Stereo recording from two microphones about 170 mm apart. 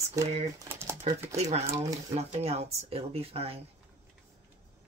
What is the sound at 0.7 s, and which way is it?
Typewriter, 15° right (ahead or behind).